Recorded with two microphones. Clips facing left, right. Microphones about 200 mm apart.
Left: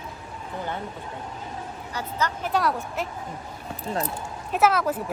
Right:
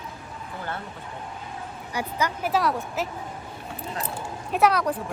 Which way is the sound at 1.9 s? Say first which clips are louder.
Right 1 dB; 10° right (ahead or behind).